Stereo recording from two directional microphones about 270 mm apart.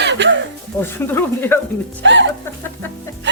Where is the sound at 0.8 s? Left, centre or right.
Centre.